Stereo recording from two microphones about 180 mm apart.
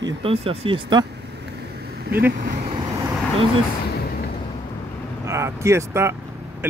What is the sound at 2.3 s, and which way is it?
Speech, 45° right (ahead or behind).